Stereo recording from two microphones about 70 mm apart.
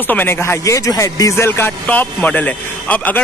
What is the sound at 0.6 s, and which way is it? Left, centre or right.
Speech, left.